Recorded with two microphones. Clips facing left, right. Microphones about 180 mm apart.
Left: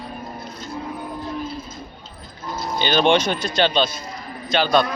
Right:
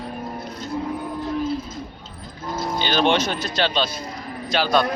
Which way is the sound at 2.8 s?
Centre (ahead or behind).